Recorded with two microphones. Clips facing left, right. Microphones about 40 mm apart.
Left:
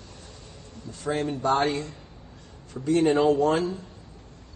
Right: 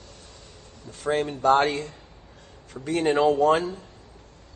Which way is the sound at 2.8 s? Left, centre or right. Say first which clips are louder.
Left 4 dB; centre.